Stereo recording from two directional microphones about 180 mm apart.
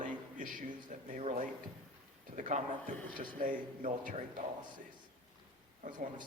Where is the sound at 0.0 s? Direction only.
45° right (ahead or behind).